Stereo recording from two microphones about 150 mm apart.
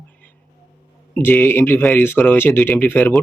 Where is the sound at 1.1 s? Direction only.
15° left (ahead or behind).